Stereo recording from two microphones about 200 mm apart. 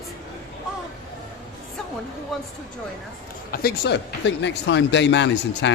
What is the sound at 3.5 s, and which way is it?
Speech, 50° left (ahead or behind).